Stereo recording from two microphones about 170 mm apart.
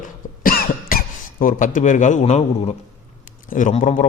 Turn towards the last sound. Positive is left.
turn(degrees=45)  # may be behind; listen again after turning